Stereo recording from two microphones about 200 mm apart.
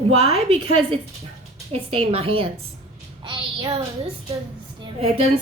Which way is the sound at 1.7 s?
30° right (ahead or behind).